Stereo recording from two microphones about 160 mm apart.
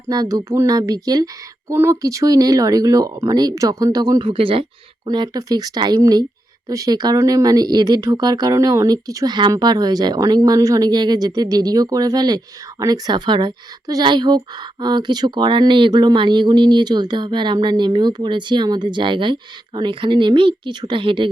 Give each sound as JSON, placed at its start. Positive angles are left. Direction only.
{"t": 0.1, "sound": "speech", "side_deg": -25}